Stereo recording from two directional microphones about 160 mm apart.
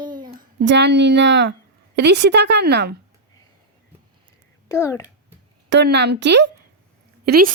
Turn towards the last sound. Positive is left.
turn(degrees=-70)  # may be behind; listen again after turning